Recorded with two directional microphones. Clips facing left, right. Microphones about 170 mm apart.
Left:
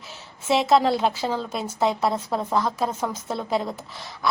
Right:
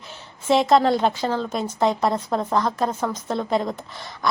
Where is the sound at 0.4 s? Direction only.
5° left (ahead or behind).